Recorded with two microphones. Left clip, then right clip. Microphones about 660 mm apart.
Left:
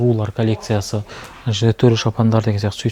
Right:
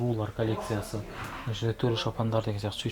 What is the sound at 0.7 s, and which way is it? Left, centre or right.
Speech, left.